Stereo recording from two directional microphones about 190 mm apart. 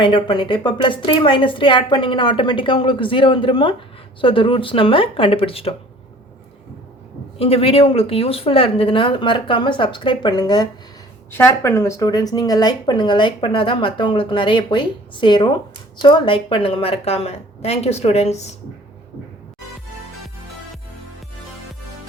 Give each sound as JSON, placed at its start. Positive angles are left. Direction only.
{"t": 0.0, "sound": "speech", "side_deg": 25}
{"t": 7.3, "sound": "a woman's voice", "side_deg": 30}